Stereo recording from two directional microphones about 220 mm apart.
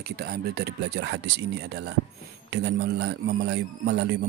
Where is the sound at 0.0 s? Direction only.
45° right (ahead or behind).